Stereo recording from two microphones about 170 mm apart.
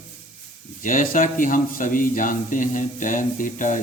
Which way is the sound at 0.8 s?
50° left (ahead or behind).